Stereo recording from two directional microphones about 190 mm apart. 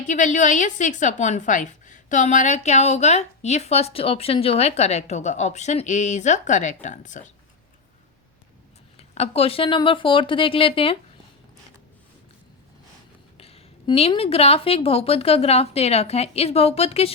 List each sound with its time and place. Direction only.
0.0 s a woman's voice: 40° left (ahead or behind)
9.0 s speech: 35° left (ahead or behind)
13.3 s a woman's voice: 30° left (ahead or behind)